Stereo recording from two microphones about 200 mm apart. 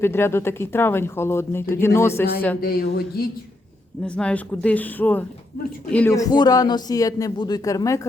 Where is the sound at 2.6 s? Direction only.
50° left (ahead or behind).